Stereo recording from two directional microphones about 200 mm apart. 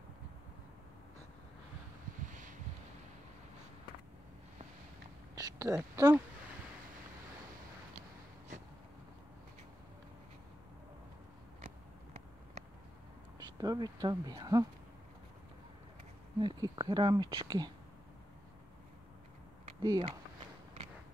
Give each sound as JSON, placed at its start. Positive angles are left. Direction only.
{"t": 5.3, "sound": "speech", "side_deg": -15}
{"t": 11.6, "sound": "vehicle", "side_deg": -30}
{"t": 13.6, "sound": "speech", "side_deg": -20}
{"t": 16.3, "sound": "speech", "side_deg": -20}
{"t": 19.8, "sound": "speech", "side_deg": -20}